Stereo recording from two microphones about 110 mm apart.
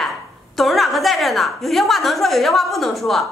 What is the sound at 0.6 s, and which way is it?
A woman's voice, centre (ahead or behind).